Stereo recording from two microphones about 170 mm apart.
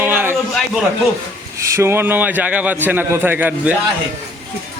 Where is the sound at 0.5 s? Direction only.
5° right (ahead or behind).